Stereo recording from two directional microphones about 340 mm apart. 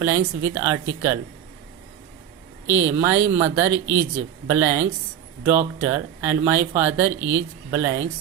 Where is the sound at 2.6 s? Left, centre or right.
Centre.